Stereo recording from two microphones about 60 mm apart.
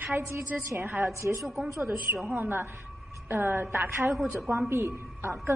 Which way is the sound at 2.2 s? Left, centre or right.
Right.